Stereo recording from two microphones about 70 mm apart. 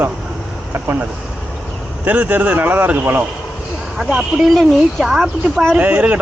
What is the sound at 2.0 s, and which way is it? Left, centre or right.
Speech, right.